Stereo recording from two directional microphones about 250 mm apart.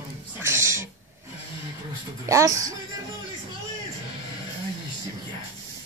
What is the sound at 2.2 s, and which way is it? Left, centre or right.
Speech, centre.